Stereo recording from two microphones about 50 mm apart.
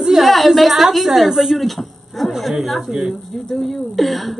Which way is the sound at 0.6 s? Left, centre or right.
Centre.